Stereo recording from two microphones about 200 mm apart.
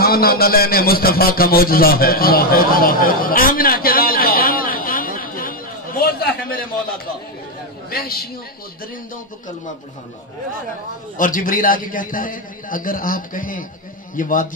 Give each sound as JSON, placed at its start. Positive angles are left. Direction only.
{"t": 0.0, "sound": "a sound", "side_deg": 50}
{"t": 7.9, "sound": "a woman's voice", "side_deg": 50}
{"t": 11.1, "sound": "a man's voice", "side_deg": 40}